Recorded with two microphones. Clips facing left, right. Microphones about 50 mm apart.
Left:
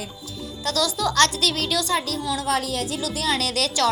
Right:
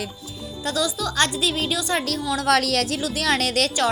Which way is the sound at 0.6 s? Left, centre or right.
Right.